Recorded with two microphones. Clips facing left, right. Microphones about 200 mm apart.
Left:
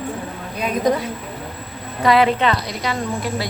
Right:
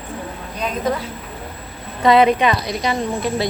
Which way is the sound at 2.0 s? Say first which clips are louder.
Right 2 dB; 20° right (ahead or behind).